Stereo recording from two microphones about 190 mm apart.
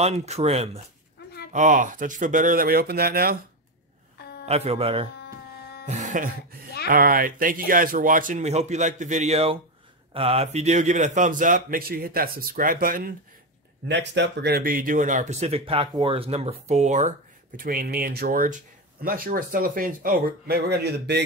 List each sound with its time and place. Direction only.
0.0 s speech: 35° right (ahead or behind); by 3.3 s 55° right (ahead or behind)
4.5 s speech: 30° right (ahead or behind); by 13.1 s 50° right (ahead or behind)
13.8 s speech: 65° right (ahead or behind); by 17.1 s 40° right (ahead or behind)
17.6 s speech: 50° right (ahead or behind)